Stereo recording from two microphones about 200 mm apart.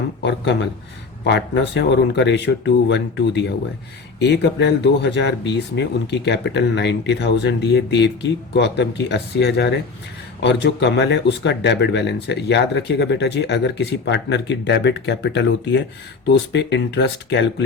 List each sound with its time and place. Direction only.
0.2 s speech: 65° left (ahead or behind)